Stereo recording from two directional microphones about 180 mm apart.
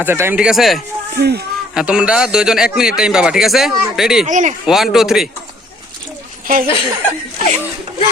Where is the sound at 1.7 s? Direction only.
5° right (ahead or behind).